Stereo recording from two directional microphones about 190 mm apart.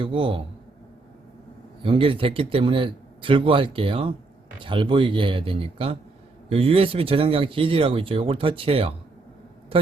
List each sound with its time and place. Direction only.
0.0 s speech: 25° right (ahead or behind)
1.8 s speech: 25° right (ahead or behind)